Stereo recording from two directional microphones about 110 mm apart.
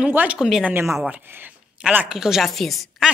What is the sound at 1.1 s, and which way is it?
A woman's voice, 20° right (ahead or behind).